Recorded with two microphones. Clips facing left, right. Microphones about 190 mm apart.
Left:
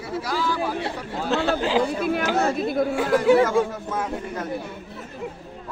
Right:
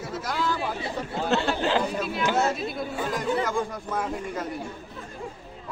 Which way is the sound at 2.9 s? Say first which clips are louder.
Left 10 dB; 85° left.